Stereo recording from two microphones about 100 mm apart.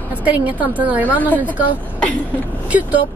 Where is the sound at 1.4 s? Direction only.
15° right (ahead or behind).